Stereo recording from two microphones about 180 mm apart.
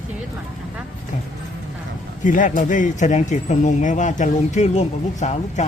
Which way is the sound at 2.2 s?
45° left (ahead or behind).